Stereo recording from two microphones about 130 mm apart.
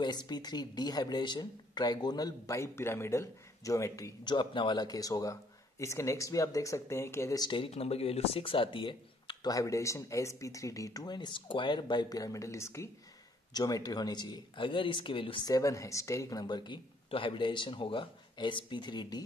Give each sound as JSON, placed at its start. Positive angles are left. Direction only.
{"t": 0.0, "sound": "speech", "side_deg": 35}
{"t": 4.2, "sound": "speech", "side_deg": 35}
{"t": 15.5, "sound": "speech", "side_deg": 25}